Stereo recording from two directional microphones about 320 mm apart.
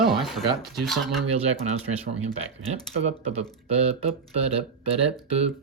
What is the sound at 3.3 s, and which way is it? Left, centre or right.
Speech, centre.